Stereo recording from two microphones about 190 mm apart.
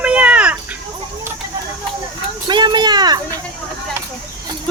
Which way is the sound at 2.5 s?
25° right (ahead or behind).